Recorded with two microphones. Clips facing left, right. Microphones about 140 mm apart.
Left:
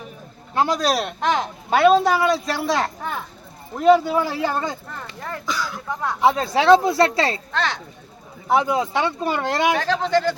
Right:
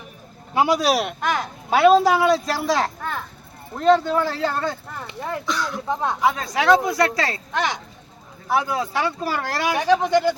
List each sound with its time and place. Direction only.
0.5 s speech: 10° right (ahead or behind)
1.2 s speech: 20° left (ahead or behind)
1.7 s a woman's voice: centre (ahead or behind)
3.0 s a sound: 10° left (ahead or behind)
3.8 s speech: 10° left (ahead or behind)
5.0 s speech: 15° right (ahead or behind)
5.5 s a woman's voice: centre (ahead or behind)
5.9 s speech: 25° right (ahead or behind)
6.2 s speech: 30° left (ahead or behind)
7.5 s speech: 15° right (ahead or behind)
8.4 s speech: 20° left (ahead or behind)
9.7 s speech: 15° right (ahead or behind)